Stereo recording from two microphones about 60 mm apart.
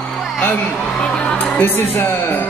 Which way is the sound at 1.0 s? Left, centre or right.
Centre.